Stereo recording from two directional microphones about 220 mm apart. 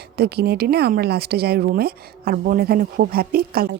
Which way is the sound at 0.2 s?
45° right (ahead or behind).